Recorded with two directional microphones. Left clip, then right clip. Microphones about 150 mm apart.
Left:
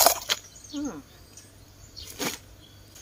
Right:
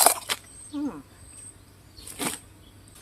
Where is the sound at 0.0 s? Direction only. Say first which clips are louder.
Left 1 dB; 20° right (ahead or behind).